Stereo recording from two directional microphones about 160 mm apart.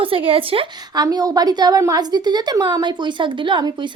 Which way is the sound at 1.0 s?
20° right (ahead or behind).